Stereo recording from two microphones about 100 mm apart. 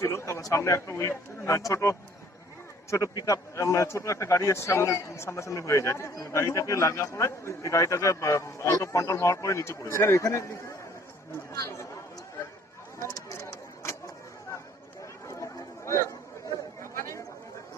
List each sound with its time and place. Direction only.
0.0 s a man's voice: 25° left (ahead or behind)
13.0 s a sound: 35° left (ahead or behind)
15.3 s chatter: 30° left (ahead or behind)